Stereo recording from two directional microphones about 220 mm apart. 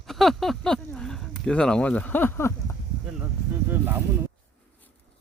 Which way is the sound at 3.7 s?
10° right (ahead or behind).